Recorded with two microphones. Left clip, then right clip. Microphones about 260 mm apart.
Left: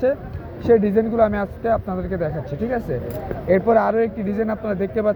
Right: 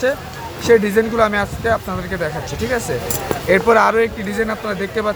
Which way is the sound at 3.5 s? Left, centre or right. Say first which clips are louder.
Right 4 dB; centre.